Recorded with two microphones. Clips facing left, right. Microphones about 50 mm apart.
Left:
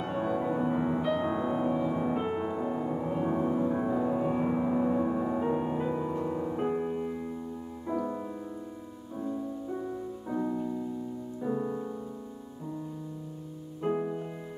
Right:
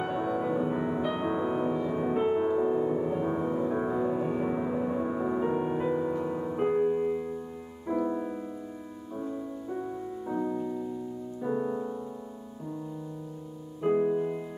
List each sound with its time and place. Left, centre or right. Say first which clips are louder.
0.1 s music: left 2 dB; centre
10.2 s music: right 1 dB; centre
13.8 s music: right 5 dB; centre
14.1 s music: right 8 dB; centre